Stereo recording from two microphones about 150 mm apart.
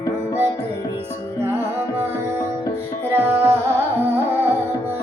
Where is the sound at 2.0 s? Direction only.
15° right (ahead or behind).